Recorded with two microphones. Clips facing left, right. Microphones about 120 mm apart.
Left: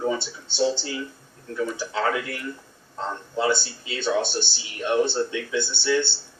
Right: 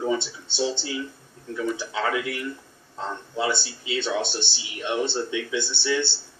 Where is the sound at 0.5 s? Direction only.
15° right (ahead or behind).